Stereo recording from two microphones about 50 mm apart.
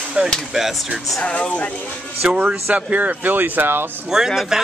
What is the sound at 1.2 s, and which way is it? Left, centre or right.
Speech, left.